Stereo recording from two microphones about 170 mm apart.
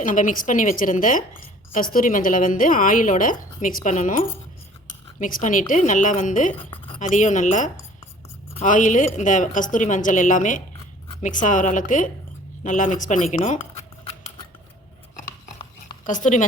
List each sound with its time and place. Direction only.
0.0 s a woman's voice: 50° left (ahead or behind)
6.6 s a sound: 30° left (ahead or behind)
7.0 s a woman's voice: 45° left (ahead or behind)
16.0 s a woman's voice: 50° left (ahead or behind)